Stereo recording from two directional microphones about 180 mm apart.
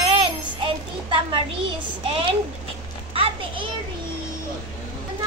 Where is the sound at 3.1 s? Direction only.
30° right (ahead or behind).